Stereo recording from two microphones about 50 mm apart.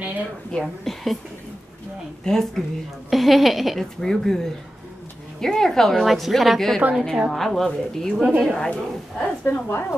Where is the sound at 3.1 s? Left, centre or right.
Centre.